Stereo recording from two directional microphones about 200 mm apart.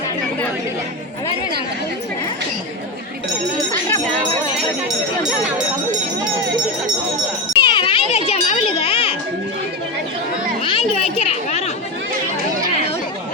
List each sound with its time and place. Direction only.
7.6 s children playing: 25° left (ahead or behind)
10.6 s chatter: 25° left (ahead or behind)